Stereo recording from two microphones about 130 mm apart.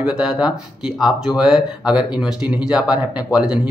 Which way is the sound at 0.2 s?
5° right (ahead or behind).